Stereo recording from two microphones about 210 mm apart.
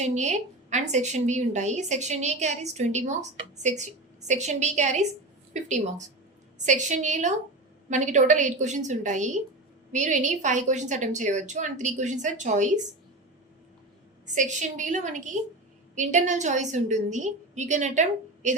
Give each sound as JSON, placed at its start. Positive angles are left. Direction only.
{"t": 0.0, "sound": "a woman's voice", "side_deg": -35}
{"t": 14.3, "sound": "a woman's voice", "side_deg": -35}